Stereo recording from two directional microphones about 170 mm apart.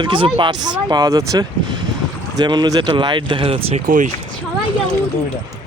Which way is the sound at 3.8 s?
50° right (ahead or behind).